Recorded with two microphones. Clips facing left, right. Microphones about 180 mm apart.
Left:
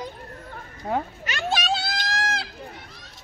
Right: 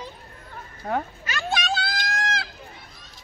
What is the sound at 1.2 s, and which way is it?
Children playing, 25° left (ahead or behind).